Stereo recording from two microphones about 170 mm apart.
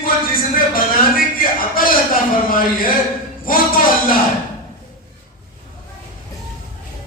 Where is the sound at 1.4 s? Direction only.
55° left (ahead or behind).